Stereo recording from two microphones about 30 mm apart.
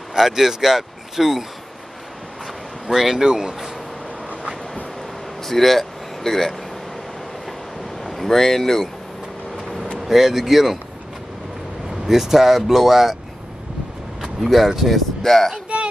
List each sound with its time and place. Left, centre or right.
0.2 s speech: centre
2.9 s speech: centre
5.4 s speech: centre
8.0 s speech: centre
9.9 s speech: centre
12.1 s speech: centre
14.2 s vehicle: centre
14.7 s speech: centre
15.2 s a child's voice: centre
15.7 s baby cry: right